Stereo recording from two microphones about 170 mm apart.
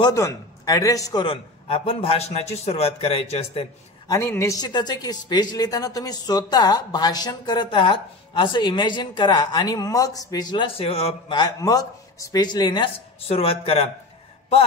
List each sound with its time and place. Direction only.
0.0 s speech: 20° left (ahead or behind)
1.2 s a man's voice: 30° left (ahead or behind)
4.1 s speech: 15° left (ahead or behind); by 13.8 s 35° left (ahead or behind)